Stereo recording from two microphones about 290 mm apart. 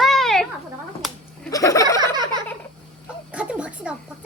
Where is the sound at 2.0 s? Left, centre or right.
Centre.